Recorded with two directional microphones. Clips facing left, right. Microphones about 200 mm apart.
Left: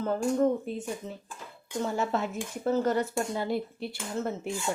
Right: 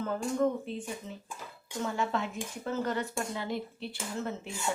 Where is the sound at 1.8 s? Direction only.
40° left (ahead or behind).